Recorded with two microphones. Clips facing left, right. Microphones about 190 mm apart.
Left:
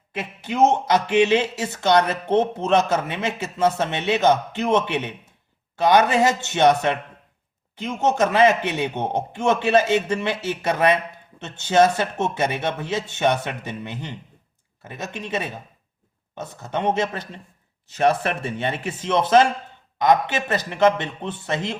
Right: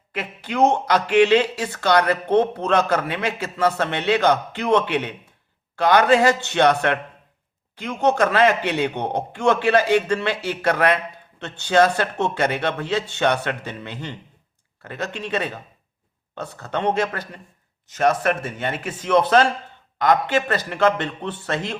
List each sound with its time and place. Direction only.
0.1 s a man's voice: 20° left (ahead or behind)